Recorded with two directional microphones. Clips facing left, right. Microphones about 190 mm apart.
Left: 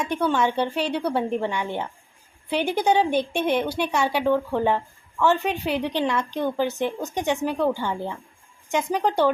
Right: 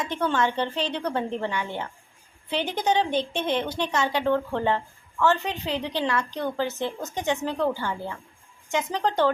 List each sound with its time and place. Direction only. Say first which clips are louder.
0.0 s a woman's voice: left 3 dB; 10° left (ahead or behind)